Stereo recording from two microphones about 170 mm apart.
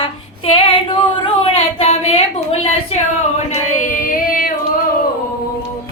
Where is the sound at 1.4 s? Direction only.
35° left (ahead or behind).